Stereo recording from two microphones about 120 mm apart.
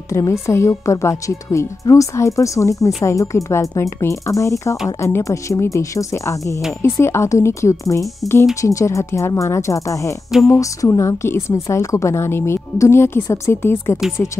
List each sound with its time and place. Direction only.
0.1 s a woman's voice: 25° left (ahead or behind)